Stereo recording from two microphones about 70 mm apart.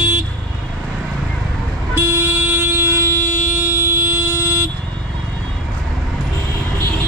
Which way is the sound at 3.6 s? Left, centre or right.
Right.